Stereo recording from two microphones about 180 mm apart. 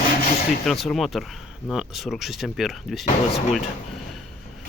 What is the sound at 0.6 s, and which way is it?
Speech, centre (ahead or behind).